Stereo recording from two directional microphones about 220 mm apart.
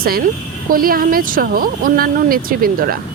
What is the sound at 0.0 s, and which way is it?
Speech, 40° right (ahead or behind).